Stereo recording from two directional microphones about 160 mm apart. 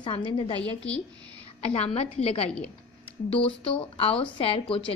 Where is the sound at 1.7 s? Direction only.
40° left (ahead or behind).